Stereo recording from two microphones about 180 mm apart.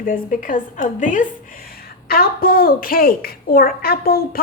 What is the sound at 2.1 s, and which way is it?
A woman's voice, 55° left (ahead or behind).